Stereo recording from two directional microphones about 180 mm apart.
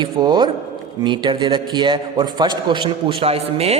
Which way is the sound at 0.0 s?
25° right (ahead or behind).